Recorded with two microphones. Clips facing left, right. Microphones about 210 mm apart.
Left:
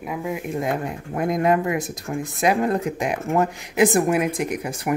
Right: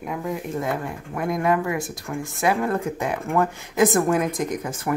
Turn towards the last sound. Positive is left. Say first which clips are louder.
# left 1 dB
turn(degrees=15)  # may be behind; listen again after turning